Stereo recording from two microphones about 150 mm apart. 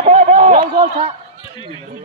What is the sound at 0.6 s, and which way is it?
Speech, 30° right (ahead or behind).